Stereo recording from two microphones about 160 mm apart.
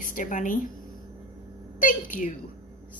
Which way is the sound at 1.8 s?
55° left (ahead or behind).